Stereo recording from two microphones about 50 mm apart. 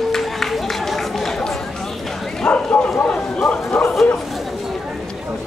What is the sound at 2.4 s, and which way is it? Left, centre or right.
Bow-wow, left.